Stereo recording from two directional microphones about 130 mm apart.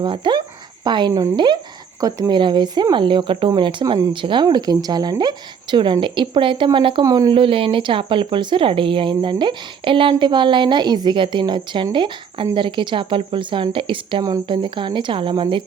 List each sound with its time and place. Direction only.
0.0 s speech: 35° right (ahead or behind)
7.0 s speech: 25° right (ahead or behind)
7.3 s speech: 45° right (ahead or behind)